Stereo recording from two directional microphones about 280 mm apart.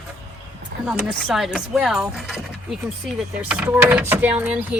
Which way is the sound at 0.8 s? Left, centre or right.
Centre.